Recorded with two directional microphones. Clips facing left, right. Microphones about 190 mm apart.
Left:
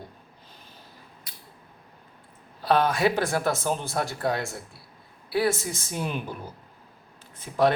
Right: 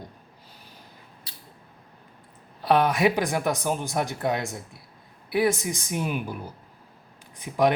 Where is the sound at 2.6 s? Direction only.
20° right (ahead or behind).